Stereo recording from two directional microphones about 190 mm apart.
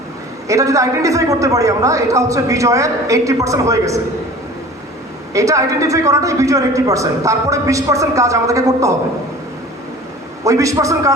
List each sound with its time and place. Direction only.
0.4 s a man's voice: 15° right (ahead or behind)
5.3 s a man's voice: 15° right (ahead or behind)
10.4 s a man's voice: 15° right (ahead or behind)